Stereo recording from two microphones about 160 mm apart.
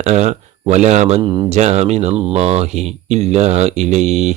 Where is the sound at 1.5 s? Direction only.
45° right (ahead or behind).